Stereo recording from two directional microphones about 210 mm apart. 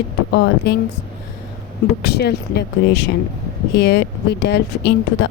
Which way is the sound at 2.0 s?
50° left (ahead or behind).